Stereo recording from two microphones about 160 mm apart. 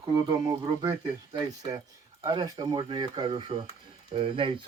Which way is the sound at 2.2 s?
25° right (ahead or behind).